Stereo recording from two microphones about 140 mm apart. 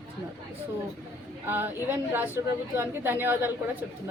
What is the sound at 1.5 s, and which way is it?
A woman's voice, 15° right (ahead or behind).